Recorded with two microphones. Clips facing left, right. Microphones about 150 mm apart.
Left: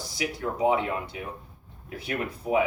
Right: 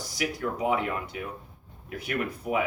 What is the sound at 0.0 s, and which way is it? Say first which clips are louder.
Speech: even; 30° left (ahead or behind).